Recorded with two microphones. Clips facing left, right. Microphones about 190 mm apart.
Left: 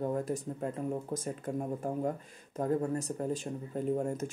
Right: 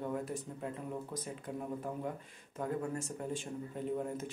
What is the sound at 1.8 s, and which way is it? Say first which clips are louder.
Speech: left 6 dB; 45° left (ahead or behind).